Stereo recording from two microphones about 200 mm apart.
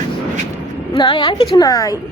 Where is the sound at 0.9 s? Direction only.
20° left (ahead or behind).